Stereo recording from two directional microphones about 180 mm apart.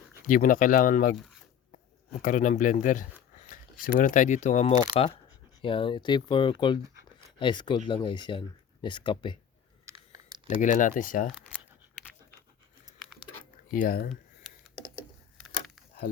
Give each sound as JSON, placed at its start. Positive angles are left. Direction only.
{"t": 0.3, "sound": "speech", "side_deg": 50}
{"t": 2.1, "sound": "speech", "side_deg": 45}
{"t": 6.8, "sound": "a sound", "side_deg": -15}
{"t": 7.3, "sound": "speech", "side_deg": 25}
{"t": 9.8, "sound": "a sound", "side_deg": -20}
{"t": 10.6, "sound": "speech", "side_deg": 45}
{"t": 13.7, "sound": "speech", "side_deg": 50}